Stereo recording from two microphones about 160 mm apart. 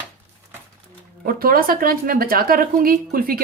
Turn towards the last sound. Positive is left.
turn(degrees=-65)  # may be behind; listen again after turning